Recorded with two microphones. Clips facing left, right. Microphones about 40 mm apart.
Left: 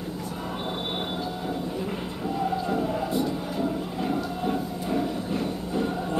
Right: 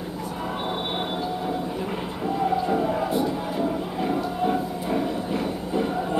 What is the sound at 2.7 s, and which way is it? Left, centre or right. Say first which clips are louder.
Music: right 3 dB; centre.